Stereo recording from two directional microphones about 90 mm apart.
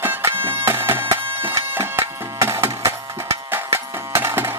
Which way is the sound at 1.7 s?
30° right (ahead or behind).